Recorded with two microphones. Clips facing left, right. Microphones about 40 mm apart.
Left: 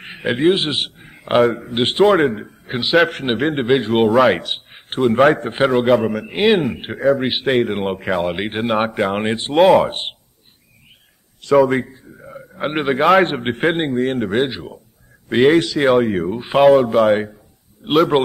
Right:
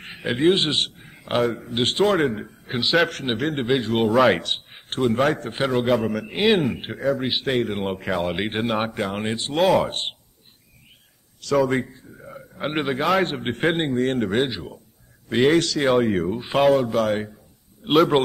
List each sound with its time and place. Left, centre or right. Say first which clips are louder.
0.0 s a sound: left 4 dB; centre
0.5 s a man's voice: left 1 dB; centre
2.0 s a man's voice: left 6 dB; centre
4.1 s a man's voice: left 3 dB; centre; by 5.8 s left
5.8 s a man's voice: left 6 dB; centre
7.2 s a man's voice: left 6 dB; left
8.1 s a man's voice: left 3 dB; centre
9.1 s a man's voice: left 6 dB; left
9.6 s a man's voice: left 7 dB; centre
11.5 s a man's voice: left 6 dB; centre
13.2 s a man's voice: left 6 dB; left
13.7 s a man's voice: left 3 dB; centre
15.9 s a man's voice: left 3 dB; centre
17.8 s speech: left 2 dB; centre